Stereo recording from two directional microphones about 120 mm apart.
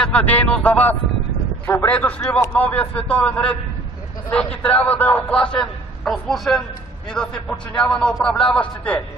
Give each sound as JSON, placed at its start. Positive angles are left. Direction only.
{"t": 0.0, "sound": "a man's voice", "side_deg": 10}